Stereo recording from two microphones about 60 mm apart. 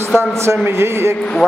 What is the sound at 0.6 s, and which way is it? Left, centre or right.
Speech, right.